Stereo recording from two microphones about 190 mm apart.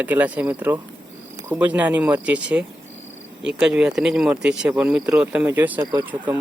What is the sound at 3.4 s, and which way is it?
Speech, 5° right (ahead or behind).